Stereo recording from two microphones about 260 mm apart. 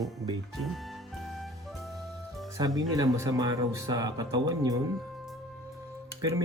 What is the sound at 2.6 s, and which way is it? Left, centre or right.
Speech, centre.